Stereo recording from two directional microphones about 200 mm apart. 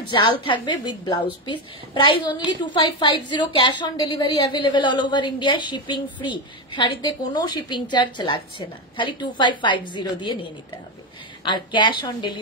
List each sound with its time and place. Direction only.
0.1 s a woman's voice: 25° left (ahead or behind)
11.4 s a woman's voice: 25° left (ahead or behind)